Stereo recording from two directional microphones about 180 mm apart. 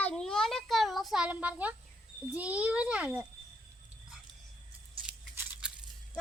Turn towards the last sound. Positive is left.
turn(degrees=-5)  # may be behind; listen again after turning